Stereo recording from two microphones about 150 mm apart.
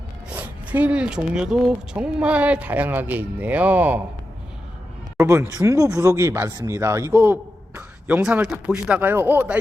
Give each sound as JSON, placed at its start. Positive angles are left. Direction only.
{"t": 0.3, "sound": "speech", "side_deg": -10}
{"t": 5.1, "sound": "speech", "side_deg": -20}